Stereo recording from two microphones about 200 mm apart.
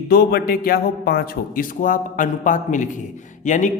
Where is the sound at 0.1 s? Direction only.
50° left (ahead or behind).